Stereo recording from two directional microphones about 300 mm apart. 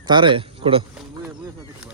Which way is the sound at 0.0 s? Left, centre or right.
Centre.